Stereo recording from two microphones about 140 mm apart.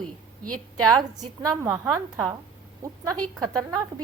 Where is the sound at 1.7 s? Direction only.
10° right (ahead or behind).